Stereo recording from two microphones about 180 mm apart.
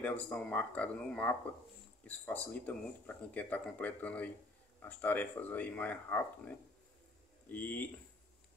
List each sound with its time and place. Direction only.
0.0 s speech: 5° left (ahead or behind)